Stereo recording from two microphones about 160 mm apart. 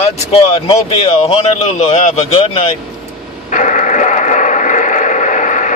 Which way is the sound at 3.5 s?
50° left (ahead or behind).